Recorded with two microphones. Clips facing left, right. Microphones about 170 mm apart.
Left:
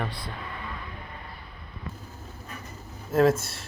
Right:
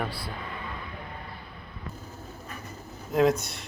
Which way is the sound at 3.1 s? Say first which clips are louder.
Left 2 dB; centre (ahead or behind).